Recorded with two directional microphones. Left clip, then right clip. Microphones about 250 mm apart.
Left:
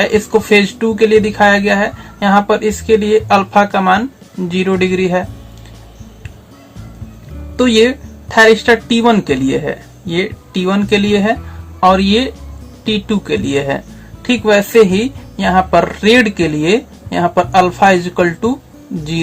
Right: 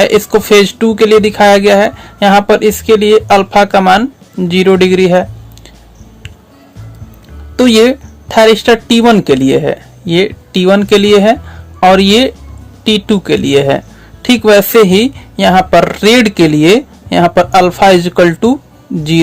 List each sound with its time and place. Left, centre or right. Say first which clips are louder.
0.0 s speech: right 4 dB; right
7.5 s speech: right 4 dB; right